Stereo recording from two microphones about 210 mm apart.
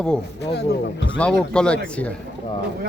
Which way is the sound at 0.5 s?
55° left (ahead or behind).